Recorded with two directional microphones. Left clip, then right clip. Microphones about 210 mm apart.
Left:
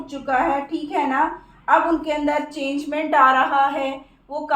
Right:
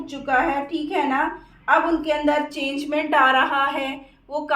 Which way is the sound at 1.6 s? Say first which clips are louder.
Left 1 dB; 40° right (ahead or behind).